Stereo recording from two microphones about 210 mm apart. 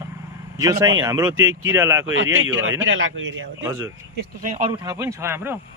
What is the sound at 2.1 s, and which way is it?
Speech, 70° right (ahead or behind).